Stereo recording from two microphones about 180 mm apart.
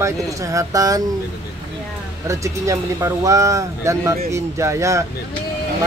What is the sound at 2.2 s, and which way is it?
Speech, 15° right (ahead or behind).